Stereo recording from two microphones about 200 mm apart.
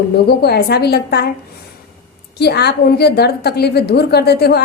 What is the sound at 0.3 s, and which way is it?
Speech, 55° left (ahead or behind).